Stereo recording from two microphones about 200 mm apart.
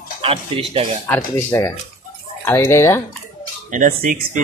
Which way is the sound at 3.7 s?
40° right (ahead or behind).